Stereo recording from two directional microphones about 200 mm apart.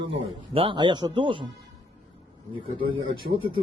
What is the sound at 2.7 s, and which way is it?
Speech, 25° right (ahead or behind).